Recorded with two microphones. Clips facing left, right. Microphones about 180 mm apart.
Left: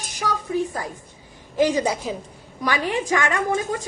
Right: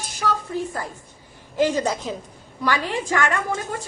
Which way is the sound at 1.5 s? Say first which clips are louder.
Left 1 dB; 15° left (ahead or behind).